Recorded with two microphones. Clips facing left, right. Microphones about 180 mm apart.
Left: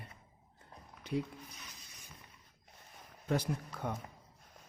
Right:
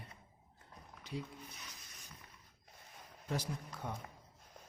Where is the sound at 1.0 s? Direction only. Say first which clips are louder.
Left 8 dB; 55° left (ahead or behind).